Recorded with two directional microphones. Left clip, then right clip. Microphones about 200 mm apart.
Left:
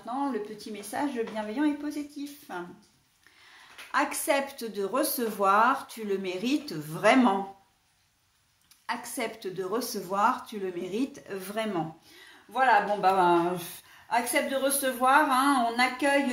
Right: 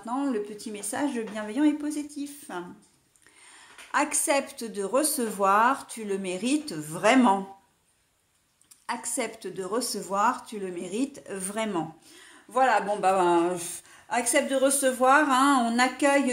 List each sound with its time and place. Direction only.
0.0 s a woman's voice: 50° right (ahead or behind)
3.5 s a woman's voice: 30° right (ahead or behind)
8.8 s a woman's voice: 30° right (ahead or behind); by 16.2 s 45° right (ahead or behind)